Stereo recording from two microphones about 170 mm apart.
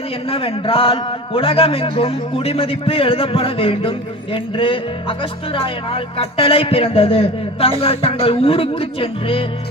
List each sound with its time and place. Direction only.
0.3 s a man's voice: 35° left (ahead or behind)